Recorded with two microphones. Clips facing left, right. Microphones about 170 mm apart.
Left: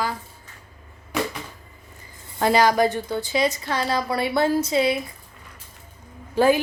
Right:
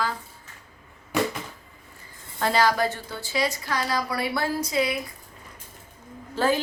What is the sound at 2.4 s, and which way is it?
A woman's voice, 15° left (ahead or behind).